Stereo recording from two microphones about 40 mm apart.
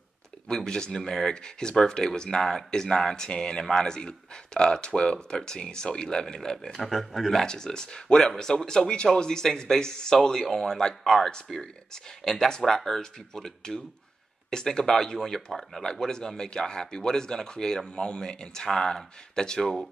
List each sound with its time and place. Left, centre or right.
0.5 s speech: centre
6.8 s speech: centre
7.4 s speech: centre
19.6 s speech: centre